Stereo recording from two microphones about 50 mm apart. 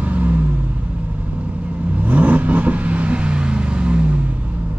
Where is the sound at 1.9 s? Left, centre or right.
Right.